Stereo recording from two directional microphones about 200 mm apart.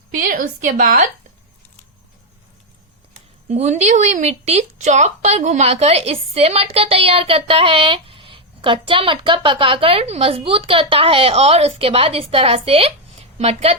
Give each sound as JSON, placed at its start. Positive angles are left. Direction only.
{"t": 0.3, "sound": "a woman's voice", "side_deg": -40}
{"t": 3.5, "sound": "a woman's voice", "side_deg": -35}